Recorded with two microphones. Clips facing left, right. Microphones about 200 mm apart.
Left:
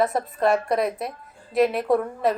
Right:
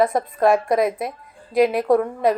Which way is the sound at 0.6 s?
Centre (ahead or behind).